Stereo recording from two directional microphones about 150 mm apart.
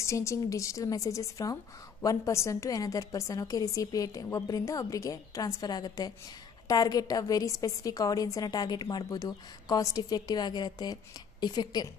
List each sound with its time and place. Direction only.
0.0 s a woman's voice: 20° left (ahead or behind)